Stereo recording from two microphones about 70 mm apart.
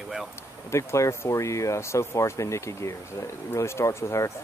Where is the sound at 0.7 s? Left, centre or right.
Left.